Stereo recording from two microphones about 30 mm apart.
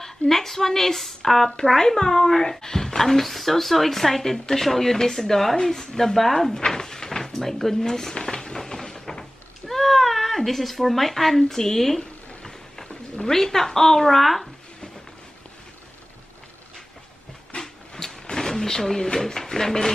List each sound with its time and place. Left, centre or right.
0.0 s speech: centre
1.8 s speech: centre
6.5 s drawer open or close: centre
9.7 s cat: centre
11.4 s speech: centre
12.4 s a sound: centre
13.2 s speech: centre
17.6 s a sound: centre
19.1 s speech: centre